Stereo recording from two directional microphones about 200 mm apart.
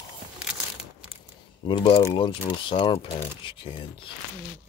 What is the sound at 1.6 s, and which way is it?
Speech, 25° left (ahead or behind).